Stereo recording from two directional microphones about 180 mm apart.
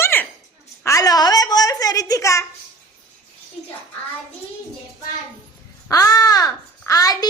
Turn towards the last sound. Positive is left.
turn(degrees=20)  # may be behind; listen again after turning